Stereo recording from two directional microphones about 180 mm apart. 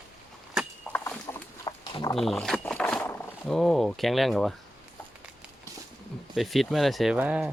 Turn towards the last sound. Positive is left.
turn(degrees=-5)  # may be behind; listen again after turning